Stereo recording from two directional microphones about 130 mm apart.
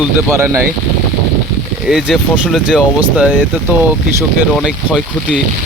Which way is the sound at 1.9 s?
5° right (ahead or behind).